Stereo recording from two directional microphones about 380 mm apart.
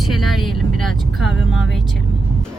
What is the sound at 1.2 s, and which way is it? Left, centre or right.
Speech, left.